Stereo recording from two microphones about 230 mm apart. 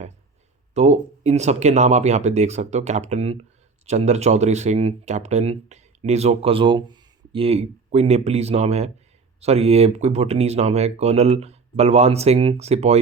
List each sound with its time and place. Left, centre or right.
0.7 s speech: right